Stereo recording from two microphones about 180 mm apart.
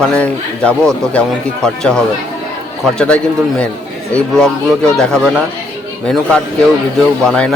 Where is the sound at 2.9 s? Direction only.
5° left (ahead or behind).